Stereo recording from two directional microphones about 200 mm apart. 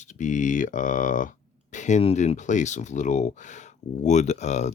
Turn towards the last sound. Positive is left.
turn(degrees=35)  # may be behind; listen again after turning